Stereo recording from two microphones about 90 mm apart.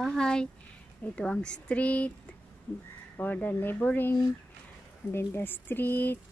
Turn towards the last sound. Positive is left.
turn(degrees=20)  # may be behind; listen again after turning